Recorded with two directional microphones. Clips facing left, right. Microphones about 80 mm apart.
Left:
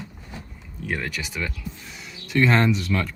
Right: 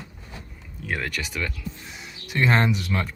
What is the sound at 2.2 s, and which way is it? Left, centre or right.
Speech, centre.